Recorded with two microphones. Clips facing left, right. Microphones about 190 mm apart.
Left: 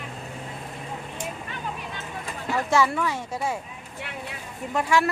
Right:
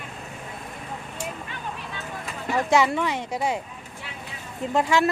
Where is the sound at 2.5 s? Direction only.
20° right (ahead or behind).